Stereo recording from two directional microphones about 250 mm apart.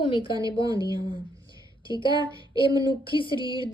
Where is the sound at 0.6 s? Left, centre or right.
Centre.